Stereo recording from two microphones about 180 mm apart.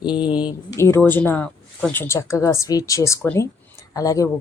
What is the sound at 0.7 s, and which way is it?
Speech, 15° left (ahead or behind).